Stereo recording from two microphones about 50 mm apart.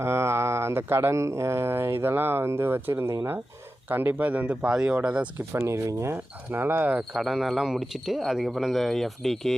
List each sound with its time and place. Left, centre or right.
0.0 s speech: right
3.8 s speech: right
4.7 s speech: centre
5.5 s speech: right
6.1 s speech: right
7.1 s speech: centre